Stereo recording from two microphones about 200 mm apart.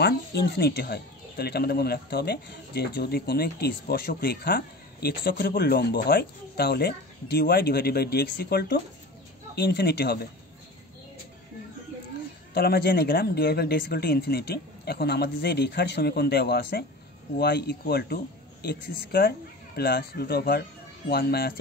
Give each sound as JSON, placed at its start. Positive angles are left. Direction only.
{"t": 0.0, "sound": "speech", "side_deg": 55}
{"t": 12.5, "sound": "speech", "side_deg": 50}